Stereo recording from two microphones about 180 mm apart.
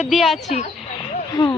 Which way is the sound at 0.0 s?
Centre (ahead or behind).